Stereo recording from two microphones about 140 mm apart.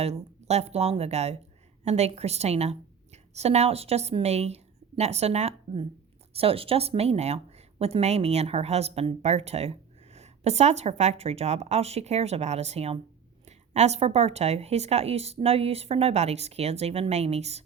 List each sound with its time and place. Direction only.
0.0 s a woman's voice: 50° right (ahead or behind)